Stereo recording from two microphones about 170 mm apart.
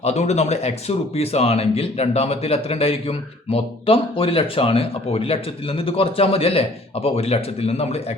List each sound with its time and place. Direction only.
0.0 s speech: 40° left (ahead or behind)